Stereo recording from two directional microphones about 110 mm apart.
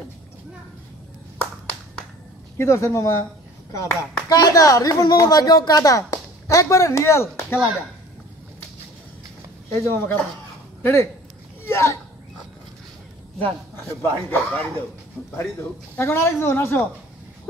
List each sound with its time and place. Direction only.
2.5 s speech: 25° left (ahead or behind)
9.8 s speech: 20° left (ahead or behind)
13.4 s speech: 20° left (ahead or behind)